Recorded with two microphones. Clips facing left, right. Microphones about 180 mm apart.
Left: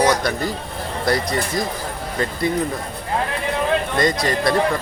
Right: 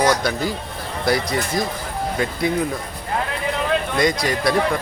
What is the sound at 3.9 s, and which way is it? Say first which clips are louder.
Speech: even; centre (ahead or behind).